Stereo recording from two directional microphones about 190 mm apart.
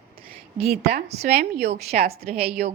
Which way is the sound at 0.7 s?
55° right (ahead or behind).